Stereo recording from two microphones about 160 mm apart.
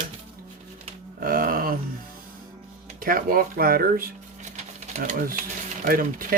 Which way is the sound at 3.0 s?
60° right (ahead or behind).